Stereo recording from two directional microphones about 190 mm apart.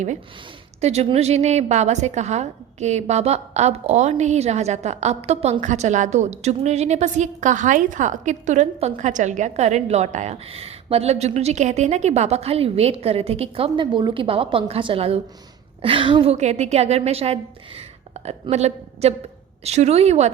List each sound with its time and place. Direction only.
0.8 s a woman's voice: 35° right (ahead or behind)